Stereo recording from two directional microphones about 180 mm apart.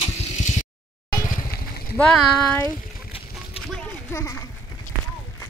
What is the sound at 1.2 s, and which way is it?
Vehicle, 55° left (ahead or behind).